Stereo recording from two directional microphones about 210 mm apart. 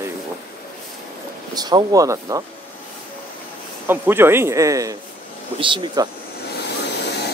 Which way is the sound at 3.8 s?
10° right (ahead or behind).